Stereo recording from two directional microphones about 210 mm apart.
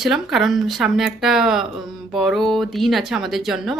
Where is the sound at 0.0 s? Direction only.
Centre (ahead or behind).